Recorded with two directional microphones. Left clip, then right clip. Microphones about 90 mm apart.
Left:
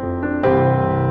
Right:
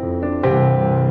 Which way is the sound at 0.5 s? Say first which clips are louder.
Left 2 dB; 20° right (ahead or behind).